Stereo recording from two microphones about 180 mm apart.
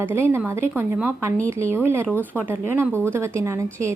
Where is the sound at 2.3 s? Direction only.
10° right (ahead or behind).